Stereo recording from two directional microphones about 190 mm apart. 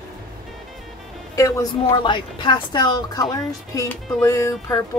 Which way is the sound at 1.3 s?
15° left (ahead or behind).